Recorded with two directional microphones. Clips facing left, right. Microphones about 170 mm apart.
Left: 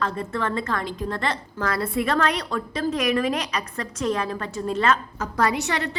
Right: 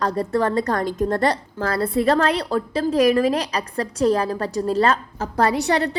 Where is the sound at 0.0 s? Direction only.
35° right (ahead or behind).